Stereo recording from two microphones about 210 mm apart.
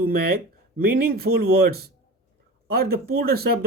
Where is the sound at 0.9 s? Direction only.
50° right (ahead or behind).